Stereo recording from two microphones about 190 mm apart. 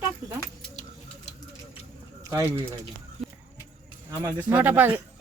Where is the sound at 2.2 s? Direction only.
15° right (ahead or behind).